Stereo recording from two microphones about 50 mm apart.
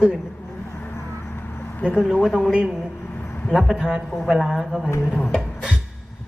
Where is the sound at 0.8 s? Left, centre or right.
Left.